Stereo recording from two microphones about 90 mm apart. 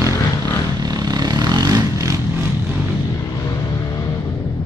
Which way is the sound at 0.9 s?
45° right (ahead or behind).